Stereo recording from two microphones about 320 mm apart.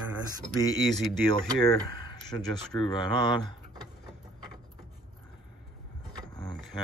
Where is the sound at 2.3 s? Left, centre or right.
Centre.